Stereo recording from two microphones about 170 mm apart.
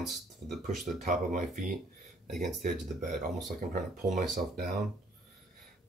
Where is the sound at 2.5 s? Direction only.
Centre (ahead or behind).